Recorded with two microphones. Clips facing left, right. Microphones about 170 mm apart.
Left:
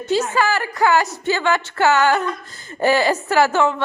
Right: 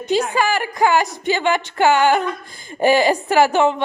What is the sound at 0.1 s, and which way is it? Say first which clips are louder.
A woman's voice: right 1 dB; 15° right (ahead or behind).